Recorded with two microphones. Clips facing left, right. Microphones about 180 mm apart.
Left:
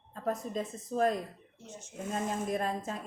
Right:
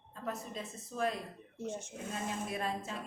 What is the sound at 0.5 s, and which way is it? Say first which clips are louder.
Speech: left 8 dB; 45° left (ahead or behind).